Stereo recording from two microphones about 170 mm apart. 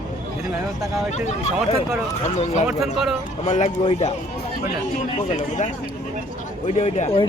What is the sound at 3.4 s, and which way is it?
Speech, 45° left (ahead or behind).